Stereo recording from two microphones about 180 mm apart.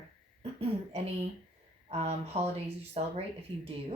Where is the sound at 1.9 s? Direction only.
35° right (ahead or behind).